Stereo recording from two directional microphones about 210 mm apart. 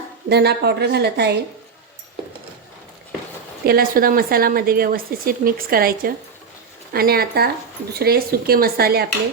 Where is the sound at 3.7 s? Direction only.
45° right (ahead or behind).